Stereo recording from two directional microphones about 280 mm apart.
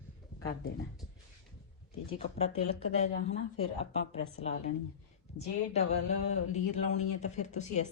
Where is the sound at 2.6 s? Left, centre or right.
Left.